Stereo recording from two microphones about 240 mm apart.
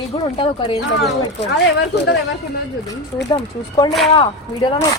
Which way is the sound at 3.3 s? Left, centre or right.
Centre.